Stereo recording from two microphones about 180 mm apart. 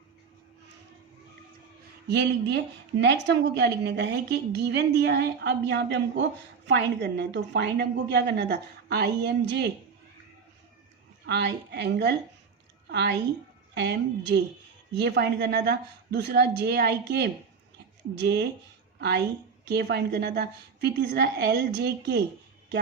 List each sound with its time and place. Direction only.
2.0 s a woman's voice: 70° right (ahead or behind)
11.3 s a woman's voice: 75° right (ahead or behind)
13.7 s a woman's voice: 70° right (ahead or behind)